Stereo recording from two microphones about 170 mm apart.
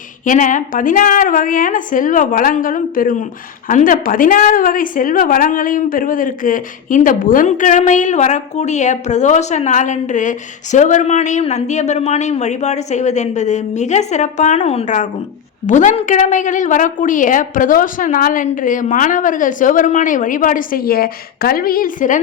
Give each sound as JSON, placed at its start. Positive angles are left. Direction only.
{"t": 0.3, "sound": "a woman's voice", "side_deg": 50}